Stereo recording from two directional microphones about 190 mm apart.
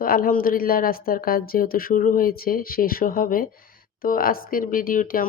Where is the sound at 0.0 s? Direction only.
50° left (ahead or behind).